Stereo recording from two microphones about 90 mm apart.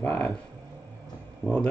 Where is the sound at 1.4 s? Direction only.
20° left (ahead or behind).